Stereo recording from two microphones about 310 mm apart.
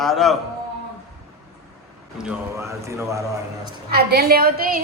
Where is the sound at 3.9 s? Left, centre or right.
Right.